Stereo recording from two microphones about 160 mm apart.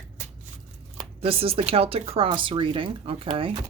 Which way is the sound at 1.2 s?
35° right (ahead or behind).